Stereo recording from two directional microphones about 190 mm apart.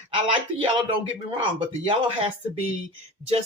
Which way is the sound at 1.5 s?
30° right (ahead or behind).